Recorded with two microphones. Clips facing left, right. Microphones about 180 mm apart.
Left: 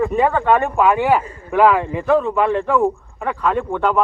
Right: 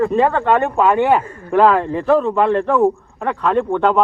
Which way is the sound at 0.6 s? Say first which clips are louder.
Right 2 dB; centre (ahead or behind).